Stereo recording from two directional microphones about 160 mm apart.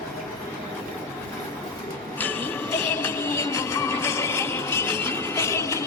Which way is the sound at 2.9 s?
15° left (ahead or behind).